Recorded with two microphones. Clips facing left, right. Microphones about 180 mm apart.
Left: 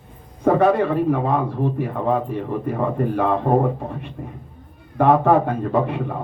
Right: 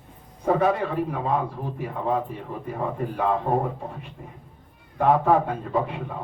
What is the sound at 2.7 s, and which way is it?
Speech, 65° left (ahead or behind).